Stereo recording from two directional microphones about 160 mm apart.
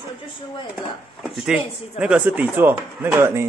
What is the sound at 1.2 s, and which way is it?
Speech, 5° right (ahead or behind).